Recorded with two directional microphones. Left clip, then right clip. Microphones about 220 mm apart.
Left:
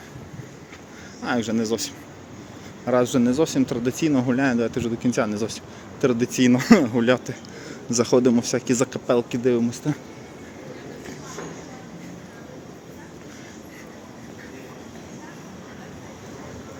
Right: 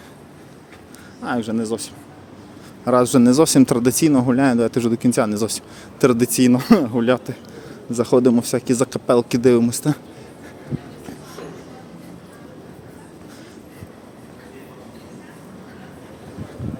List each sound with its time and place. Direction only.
1.2 s speech: 10° right (ahead or behind)
2.8 s speech: 25° right (ahead or behind)
6.5 s speech: 10° right (ahead or behind); by 10.0 s 30° right (ahead or behind)